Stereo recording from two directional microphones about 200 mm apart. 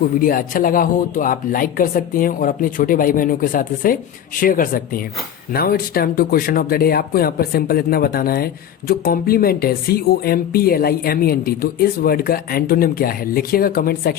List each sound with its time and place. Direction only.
0.2 s speech: 45° left (ahead or behind)